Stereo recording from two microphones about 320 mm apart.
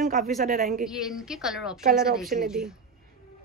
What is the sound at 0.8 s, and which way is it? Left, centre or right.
Speech, centre.